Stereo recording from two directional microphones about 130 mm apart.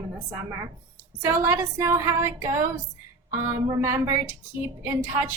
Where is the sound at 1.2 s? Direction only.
25° right (ahead or behind).